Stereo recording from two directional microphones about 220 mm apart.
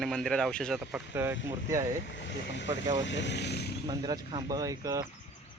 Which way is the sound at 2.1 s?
55° left (ahead or behind).